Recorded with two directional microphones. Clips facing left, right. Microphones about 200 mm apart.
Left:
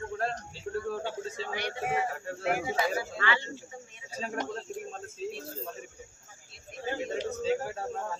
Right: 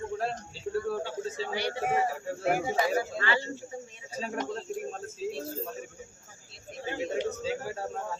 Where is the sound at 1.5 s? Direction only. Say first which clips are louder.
Right 3 dB; 30° right (ahead or behind).